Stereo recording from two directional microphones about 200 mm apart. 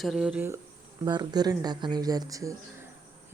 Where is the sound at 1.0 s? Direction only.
20° right (ahead or behind).